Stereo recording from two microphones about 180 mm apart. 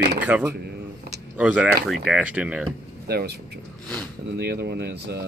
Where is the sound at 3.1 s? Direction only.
60° right (ahead or behind).